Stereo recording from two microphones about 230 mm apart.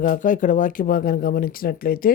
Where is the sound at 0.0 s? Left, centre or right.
Left.